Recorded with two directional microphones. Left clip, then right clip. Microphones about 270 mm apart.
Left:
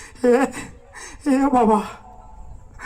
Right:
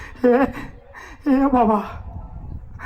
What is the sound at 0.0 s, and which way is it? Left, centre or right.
A man's voice, left.